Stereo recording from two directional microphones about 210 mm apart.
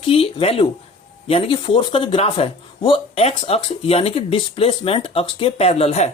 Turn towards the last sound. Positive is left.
turn(degrees=30)  # may be behind; listen again after turning